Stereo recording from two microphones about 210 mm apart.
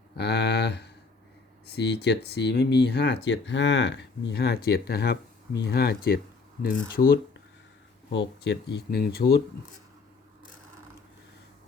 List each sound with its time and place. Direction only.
0.2 s a sound: 55° left (ahead or behind)
1.6 s speech: 55° left (ahead or behind)
8.1 s speech: 55° left (ahead or behind)